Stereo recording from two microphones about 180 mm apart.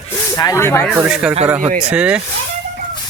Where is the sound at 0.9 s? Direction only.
5° right (ahead or behind).